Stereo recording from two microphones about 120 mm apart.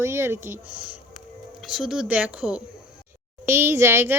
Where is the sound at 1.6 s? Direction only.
5° right (ahead or behind).